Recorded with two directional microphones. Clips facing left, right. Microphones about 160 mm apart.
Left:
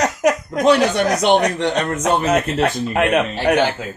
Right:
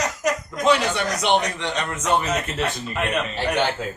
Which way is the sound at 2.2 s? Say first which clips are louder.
Left 8 dB; 60° left (ahead or behind).